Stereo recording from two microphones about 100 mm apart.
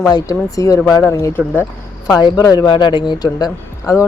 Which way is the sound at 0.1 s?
35° left (ahead or behind).